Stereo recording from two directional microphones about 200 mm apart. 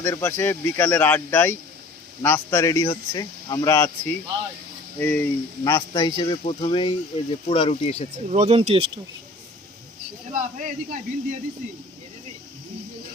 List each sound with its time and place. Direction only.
0.0 s speech: 15° left (ahead or behind); by 8.0 s 30° left (ahead or behind)
8.3 s speech: 30° right (ahead or behind)
10.3 s speech: 40° right (ahead or behind)